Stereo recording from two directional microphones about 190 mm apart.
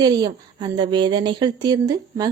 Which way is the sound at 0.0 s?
20° right (ahead or behind).